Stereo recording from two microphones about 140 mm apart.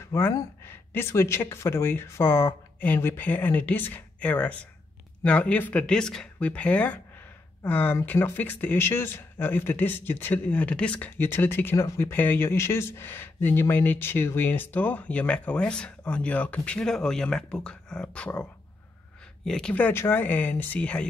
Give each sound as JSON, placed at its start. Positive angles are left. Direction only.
{"t": 0.0, "sound": "speech", "side_deg": 20}